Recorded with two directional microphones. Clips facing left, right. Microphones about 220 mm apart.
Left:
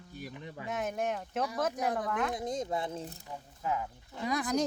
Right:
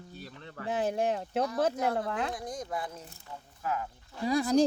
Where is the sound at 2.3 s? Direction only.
20° left (ahead or behind).